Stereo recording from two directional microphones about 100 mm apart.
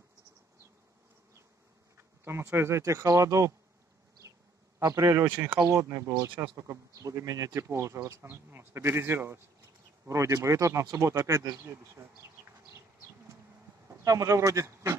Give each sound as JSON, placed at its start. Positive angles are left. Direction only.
{"t": 2.0, "sound": "speech", "side_deg": -25}
{"t": 4.7, "sound": "speech", "side_deg": -30}
{"t": 5.3, "sound": "speech", "side_deg": -20}
{"t": 5.7, "sound": "speech", "side_deg": -35}
{"t": 13.8, "sound": "speech", "side_deg": -35}